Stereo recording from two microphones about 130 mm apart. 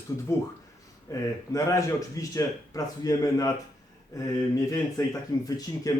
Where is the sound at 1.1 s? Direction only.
25° left (ahead or behind).